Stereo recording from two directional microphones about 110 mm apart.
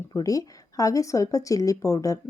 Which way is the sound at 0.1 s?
30° left (ahead or behind).